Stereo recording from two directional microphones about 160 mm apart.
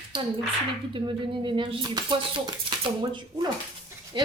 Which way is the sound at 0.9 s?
30° right (ahead or behind).